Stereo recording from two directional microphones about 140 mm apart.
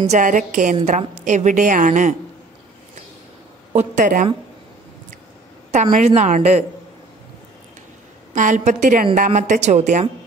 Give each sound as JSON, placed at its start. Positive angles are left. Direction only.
{"t": 0.0, "sound": "a woman's voice", "side_deg": -60}
{"t": 3.7, "sound": "a woman's voice", "side_deg": -65}
{"t": 5.7, "sound": "a woman's voice", "side_deg": -60}
{"t": 8.4, "sound": "a woman's voice", "side_deg": -65}